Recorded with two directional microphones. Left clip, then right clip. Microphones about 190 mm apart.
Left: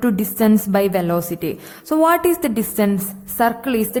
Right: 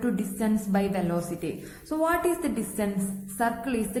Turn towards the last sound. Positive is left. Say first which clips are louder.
# left 10 dB
turn(degrees=40)  # may be behind; listen again after turning